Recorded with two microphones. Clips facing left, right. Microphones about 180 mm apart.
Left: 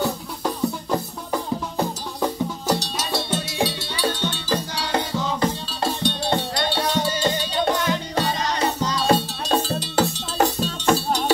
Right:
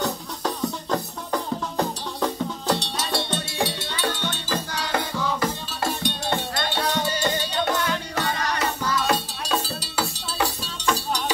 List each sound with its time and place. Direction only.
0.0 s music: 10° left (ahead or behind)
9.0 s cowbell: 40° left (ahead or behind)
11.1 s music: 45° left (ahead or behind)